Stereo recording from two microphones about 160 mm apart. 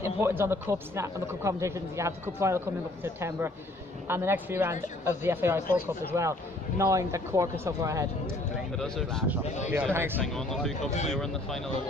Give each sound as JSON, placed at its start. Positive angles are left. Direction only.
{"t": 0.0, "sound": "speech", "side_deg": -15}
{"t": 8.7, "sound": "speech", "side_deg": 5}
{"t": 9.9, "sound": "speech", "side_deg": -15}
{"t": 10.2, "sound": "speech", "side_deg": 0}
{"t": 10.8, "sound": "speech", "side_deg": 45}
{"t": 11.1, "sound": "speech", "side_deg": 5}